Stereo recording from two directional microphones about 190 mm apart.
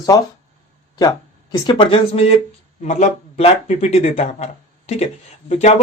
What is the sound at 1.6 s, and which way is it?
Speech, 30° left (ahead or behind).